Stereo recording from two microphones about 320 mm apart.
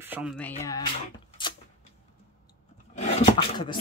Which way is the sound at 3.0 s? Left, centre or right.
Centre.